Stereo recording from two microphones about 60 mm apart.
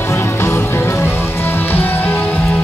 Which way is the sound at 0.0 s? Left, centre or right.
Left.